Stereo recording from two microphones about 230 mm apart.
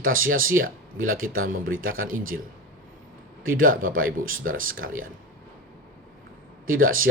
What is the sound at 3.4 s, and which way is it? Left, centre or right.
Speech, right.